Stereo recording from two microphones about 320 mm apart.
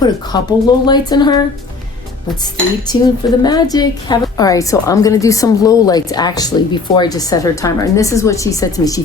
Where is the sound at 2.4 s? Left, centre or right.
Centre.